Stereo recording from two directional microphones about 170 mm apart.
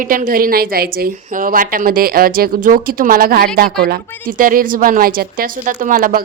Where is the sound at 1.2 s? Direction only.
55° right (ahead or behind).